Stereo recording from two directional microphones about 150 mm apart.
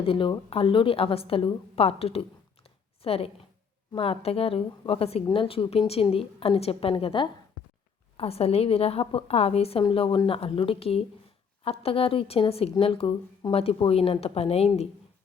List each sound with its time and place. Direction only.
0.0 s a woman's voice: 35° left (ahead or behind)